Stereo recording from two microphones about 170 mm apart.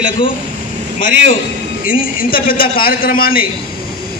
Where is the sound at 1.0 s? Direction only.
50° left (ahead or behind).